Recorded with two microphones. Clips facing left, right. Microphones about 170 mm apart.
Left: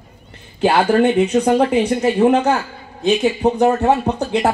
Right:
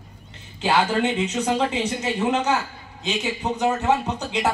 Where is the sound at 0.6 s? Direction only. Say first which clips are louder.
Left 7 dB; 60° left (ahead or behind).